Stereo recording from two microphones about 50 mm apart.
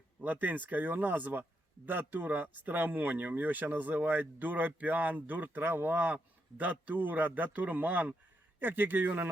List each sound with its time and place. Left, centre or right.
0.2 s speech: right